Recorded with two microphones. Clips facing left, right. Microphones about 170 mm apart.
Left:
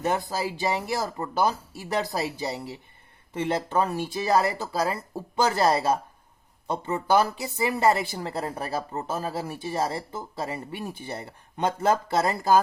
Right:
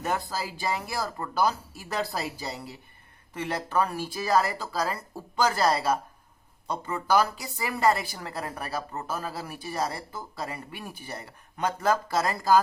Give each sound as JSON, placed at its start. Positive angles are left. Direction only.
{"t": 0.0, "sound": "a woman's voice", "side_deg": 20}